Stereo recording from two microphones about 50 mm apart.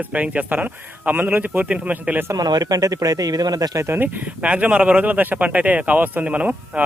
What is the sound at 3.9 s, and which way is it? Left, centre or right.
Speech, right.